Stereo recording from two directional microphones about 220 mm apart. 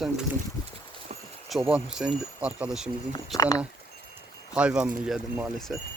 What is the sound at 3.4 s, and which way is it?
Speech, 15° left (ahead or behind).